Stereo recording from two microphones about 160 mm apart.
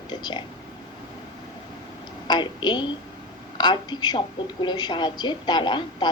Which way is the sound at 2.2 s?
30° left (ahead or behind).